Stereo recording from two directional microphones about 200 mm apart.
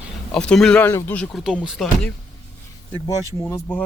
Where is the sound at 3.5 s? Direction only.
5° left (ahead or behind).